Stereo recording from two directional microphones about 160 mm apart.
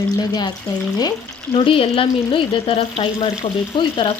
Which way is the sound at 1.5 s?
35° left (ahead or behind).